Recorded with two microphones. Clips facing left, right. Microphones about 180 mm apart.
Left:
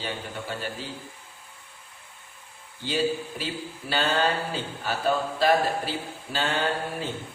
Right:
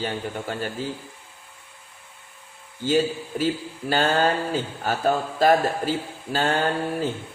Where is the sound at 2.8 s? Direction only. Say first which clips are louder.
Right 4 dB; 45° right (ahead or behind).